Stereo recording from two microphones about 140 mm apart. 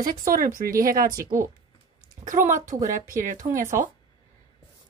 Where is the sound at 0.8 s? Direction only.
90° right.